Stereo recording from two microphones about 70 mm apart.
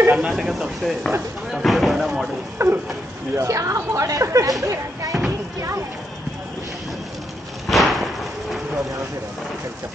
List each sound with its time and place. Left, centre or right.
0.1 s speech: centre
2.6 s speech: right
7.6 s slam: centre